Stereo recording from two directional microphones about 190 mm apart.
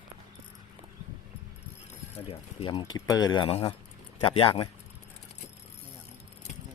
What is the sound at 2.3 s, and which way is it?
Speech, 30° left (ahead or behind).